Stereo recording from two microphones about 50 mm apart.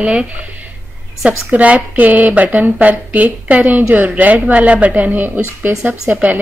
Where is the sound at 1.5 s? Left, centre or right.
Right.